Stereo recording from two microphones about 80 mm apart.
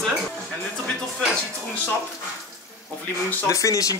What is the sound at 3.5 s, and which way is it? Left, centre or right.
Speech, left.